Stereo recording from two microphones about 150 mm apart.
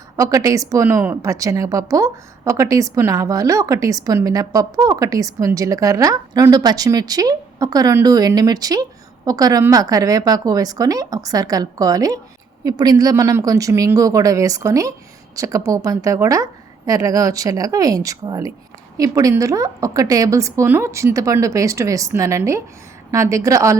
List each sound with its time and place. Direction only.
0.2 s a woman's voice: 20° right (ahead or behind)